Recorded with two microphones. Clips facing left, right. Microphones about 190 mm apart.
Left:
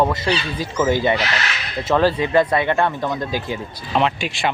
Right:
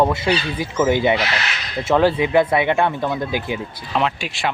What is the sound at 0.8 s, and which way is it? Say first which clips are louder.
Speech: right 1 dB; 15° right (ahead or behind).